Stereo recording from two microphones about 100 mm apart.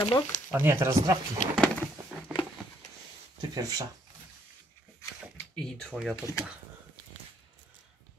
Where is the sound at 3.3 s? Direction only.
35° right (ahead or behind).